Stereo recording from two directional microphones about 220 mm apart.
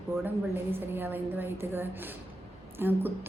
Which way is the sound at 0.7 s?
10° right (ahead or behind).